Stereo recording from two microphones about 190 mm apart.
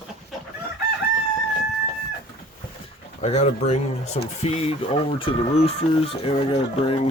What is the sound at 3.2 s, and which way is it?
Speech, 35° left (ahead or behind).